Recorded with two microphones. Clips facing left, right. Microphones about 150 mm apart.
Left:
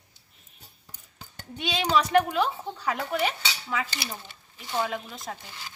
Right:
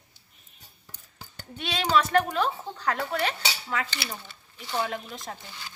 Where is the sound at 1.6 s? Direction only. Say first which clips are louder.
Even; 15° left (ahead or behind).